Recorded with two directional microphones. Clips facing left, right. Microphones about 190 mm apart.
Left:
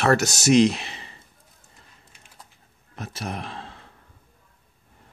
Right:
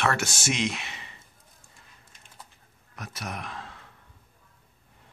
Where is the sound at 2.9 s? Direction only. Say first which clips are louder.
Left 5 dB; 30° left (ahead or behind).